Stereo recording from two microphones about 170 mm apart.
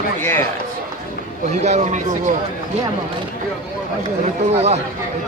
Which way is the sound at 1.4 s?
40° right (ahead or behind).